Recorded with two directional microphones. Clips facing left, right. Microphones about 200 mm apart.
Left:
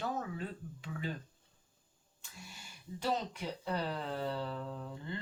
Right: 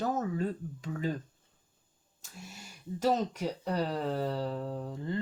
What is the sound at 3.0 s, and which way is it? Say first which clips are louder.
Speech: right 7 dB; 40° right (ahead or behind).